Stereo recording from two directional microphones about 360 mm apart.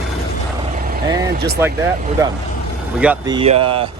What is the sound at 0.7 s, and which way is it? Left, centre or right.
Vehicle, right.